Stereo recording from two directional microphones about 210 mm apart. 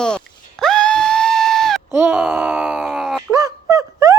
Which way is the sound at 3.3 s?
15° right (ahead or behind).